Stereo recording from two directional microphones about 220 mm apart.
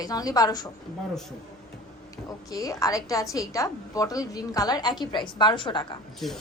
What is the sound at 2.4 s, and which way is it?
A woman's voice, 15° left (ahead or behind).